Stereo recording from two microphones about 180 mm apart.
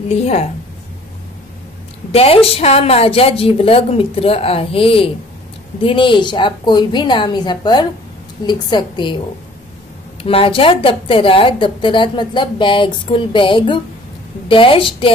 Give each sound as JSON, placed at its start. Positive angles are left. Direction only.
{"t": 0.1, "sound": "a woman's voice", "side_deg": 35}
{"t": 2.1, "sound": "a woman's voice", "side_deg": 30}
{"t": 10.2, "sound": "a woman's voice", "side_deg": 30}